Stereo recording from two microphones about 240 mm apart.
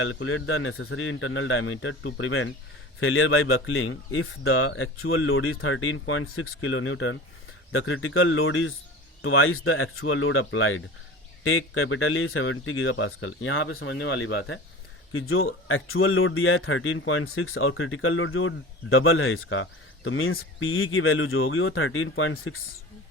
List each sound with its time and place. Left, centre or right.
0.0 s speech: left